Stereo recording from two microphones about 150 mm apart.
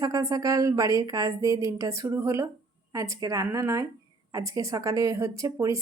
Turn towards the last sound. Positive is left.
turn(degrees=-20)  # may be behind; listen again after turning